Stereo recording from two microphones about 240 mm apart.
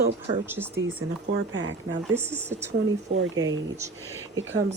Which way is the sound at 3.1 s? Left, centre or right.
Right.